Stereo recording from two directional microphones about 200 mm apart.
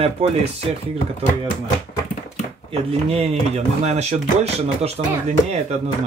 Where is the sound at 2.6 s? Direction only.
30° right (ahead or behind).